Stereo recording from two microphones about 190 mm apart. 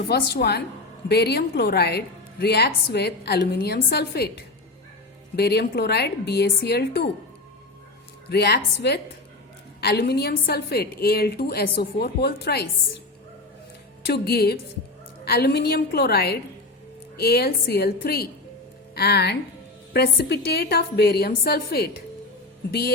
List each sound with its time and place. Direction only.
0.1 s a woman's voice: 60° left (ahead or behind)
8.3 s a woman's voice: 60° left (ahead or behind)
14.1 s a woman's voice: 55° left (ahead or behind)